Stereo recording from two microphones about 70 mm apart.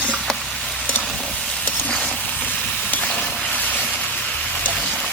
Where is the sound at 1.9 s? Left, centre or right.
Centre.